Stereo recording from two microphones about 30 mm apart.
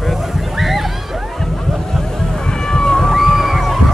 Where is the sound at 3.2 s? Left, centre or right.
Centre.